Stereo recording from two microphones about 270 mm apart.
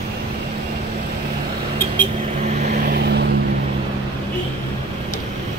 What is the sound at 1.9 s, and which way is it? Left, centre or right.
Vehicle, right.